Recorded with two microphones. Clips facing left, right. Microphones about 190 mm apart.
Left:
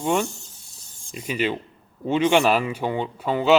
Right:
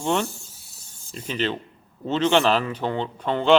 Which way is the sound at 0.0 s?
10° left (ahead or behind).